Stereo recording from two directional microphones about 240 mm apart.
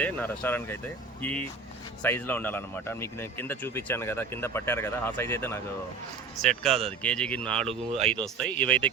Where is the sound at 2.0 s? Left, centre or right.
Centre.